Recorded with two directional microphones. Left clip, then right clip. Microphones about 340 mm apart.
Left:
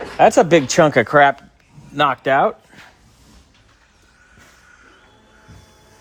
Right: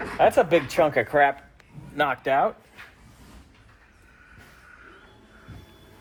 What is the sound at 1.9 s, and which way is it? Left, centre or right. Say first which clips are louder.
Speech: left 7 dB; left.